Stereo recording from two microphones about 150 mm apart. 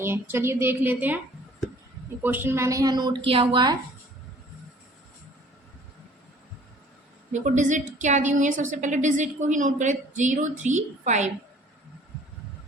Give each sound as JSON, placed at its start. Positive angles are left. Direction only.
{"t": 0.0, "sound": "a woman's voice", "side_deg": -15}
{"t": 2.2, "sound": "a woman's voice", "side_deg": -15}
{"t": 7.3, "sound": "a woman's voice", "side_deg": -55}